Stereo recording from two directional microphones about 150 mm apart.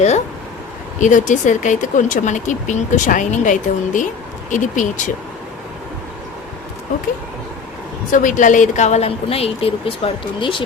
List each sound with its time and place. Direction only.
0.9 s speech: 55° left (ahead or behind)
8.1 s a woman's voice: 60° left (ahead or behind); by 10.6 s 35° left (ahead or behind)